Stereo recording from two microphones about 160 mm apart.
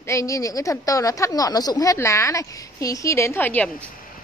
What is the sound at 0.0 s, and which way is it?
A woman's voice, 20° left (ahead or behind).